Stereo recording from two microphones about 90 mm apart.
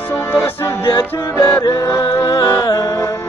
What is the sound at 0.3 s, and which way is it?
Music, 30° left (ahead or behind).